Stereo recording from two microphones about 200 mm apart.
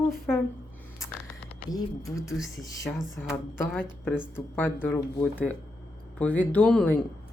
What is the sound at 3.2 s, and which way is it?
Speech, 5° left (ahead or behind).